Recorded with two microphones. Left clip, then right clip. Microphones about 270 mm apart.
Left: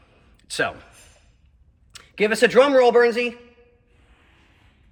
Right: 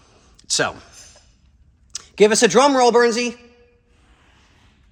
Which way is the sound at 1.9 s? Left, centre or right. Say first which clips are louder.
Right 7 dB; centre.